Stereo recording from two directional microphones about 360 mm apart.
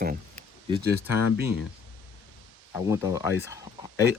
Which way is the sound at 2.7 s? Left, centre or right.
Centre.